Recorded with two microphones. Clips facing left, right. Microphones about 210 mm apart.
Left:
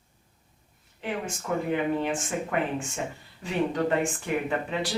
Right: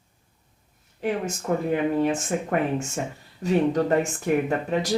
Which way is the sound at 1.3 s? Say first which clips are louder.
Right 4 dB; 40° right (ahead or behind).